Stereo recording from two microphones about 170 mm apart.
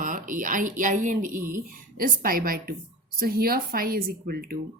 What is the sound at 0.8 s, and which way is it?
A woman's voice, 45° right (ahead or behind).